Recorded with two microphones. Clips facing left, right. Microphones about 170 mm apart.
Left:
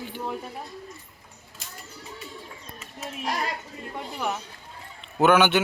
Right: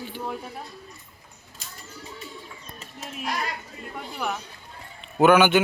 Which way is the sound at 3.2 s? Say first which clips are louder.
Left 1 dB; 30° left (ahead or behind).